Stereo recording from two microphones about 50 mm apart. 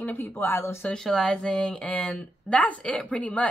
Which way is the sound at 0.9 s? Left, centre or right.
Centre.